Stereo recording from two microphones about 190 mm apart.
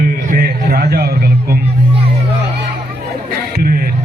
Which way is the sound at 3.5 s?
55° right (ahead or behind).